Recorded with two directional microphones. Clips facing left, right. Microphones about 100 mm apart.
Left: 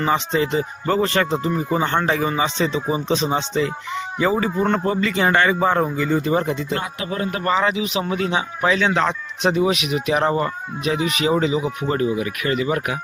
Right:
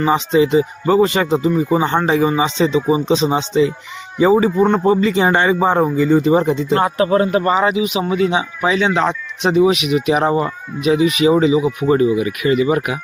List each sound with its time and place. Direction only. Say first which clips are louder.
0.0 s speech: right 6 dB; 15° right (ahead or behind)
6.7 s speech: right 11 dB; 40° right (ahead or behind)
7.3 s speech: right 5 dB; 20° right (ahead or behind)